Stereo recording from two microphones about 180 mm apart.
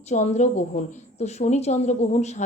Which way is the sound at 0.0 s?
40° left (ahead or behind).